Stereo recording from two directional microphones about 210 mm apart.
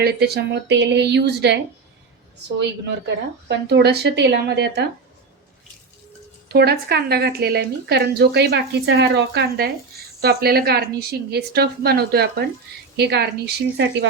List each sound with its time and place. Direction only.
0.0 s a woman's voice: 50° right (ahead or behind)
2.6 s a woman's voice: 55° right (ahead or behind)
6.5 s a woman's voice: 50° right (ahead or behind)